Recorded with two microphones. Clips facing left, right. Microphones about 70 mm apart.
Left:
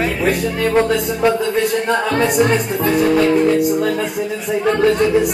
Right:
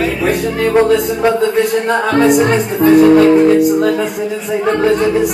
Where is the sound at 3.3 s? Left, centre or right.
Centre.